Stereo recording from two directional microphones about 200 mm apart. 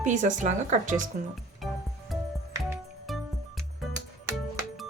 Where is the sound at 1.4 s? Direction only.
Centre (ahead or behind).